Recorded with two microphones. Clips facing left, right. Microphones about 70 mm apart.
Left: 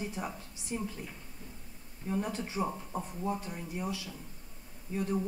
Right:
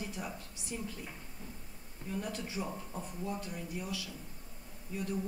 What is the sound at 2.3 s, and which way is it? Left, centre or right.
Speech, left.